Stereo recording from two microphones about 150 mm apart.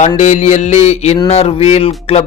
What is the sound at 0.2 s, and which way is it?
A man's voice, 50° left (ahead or behind).